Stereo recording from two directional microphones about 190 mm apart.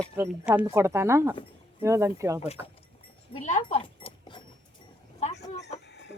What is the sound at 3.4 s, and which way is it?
Speech, 40° left (ahead or behind).